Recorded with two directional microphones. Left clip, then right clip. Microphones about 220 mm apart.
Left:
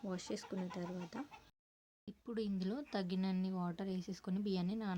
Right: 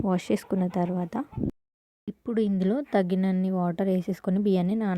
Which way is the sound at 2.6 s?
25° right (ahead or behind).